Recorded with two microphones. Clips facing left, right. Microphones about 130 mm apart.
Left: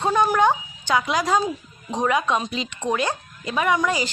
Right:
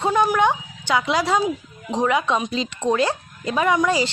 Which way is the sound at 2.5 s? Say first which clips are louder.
Right 3 dB; 35° right (ahead or behind).